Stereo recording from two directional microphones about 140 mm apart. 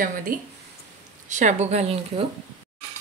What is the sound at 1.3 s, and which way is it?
Speech, 60° right (ahead or behind).